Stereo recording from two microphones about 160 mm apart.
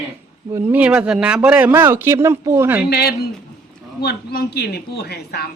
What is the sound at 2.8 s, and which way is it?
A woman's voice, 85° left.